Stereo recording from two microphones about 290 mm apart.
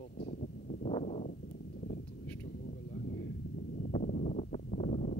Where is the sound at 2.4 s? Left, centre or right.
Left.